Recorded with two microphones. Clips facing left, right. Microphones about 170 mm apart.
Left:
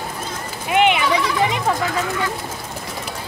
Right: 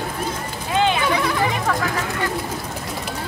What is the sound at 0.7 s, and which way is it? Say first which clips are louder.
Sheep: left 3 dB; 20° left (ahead or behind).